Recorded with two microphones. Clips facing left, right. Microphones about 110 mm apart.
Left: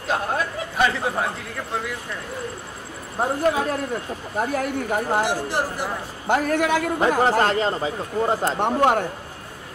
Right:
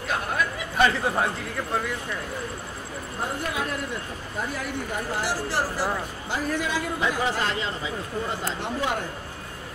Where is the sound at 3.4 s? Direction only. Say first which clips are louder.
Left 8 dB; 40° left (ahead or behind).